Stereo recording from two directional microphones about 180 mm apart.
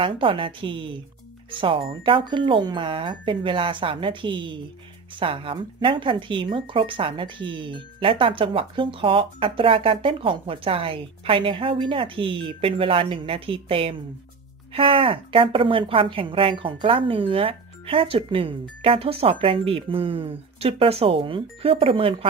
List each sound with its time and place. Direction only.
0.0 s speech: 30° right (ahead or behind)